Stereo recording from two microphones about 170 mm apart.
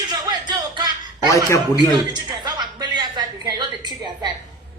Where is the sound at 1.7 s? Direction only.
25° right (ahead or behind).